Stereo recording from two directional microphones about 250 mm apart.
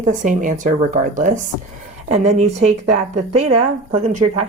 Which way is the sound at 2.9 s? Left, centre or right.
Right.